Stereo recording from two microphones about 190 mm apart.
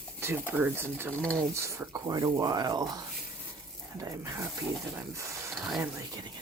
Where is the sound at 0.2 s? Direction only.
10° right (ahead or behind).